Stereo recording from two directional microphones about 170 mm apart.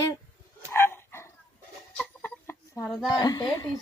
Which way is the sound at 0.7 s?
15° left (ahead or behind).